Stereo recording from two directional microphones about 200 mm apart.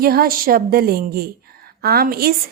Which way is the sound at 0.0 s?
50° right (ahead or behind).